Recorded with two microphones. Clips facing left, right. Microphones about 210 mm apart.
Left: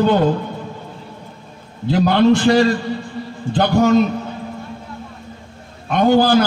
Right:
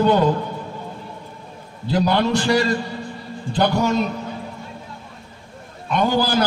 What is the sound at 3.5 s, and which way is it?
Speech, 55° left (ahead or behind).